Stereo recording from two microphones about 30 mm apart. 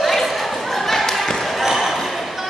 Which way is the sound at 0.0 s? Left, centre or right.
Centre.